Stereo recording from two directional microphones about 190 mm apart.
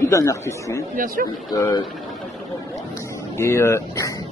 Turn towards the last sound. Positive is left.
turn(degrees=15)  # may be behind; listen again after turning